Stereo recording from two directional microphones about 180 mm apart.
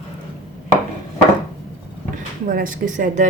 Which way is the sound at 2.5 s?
50° right (ahead or behind).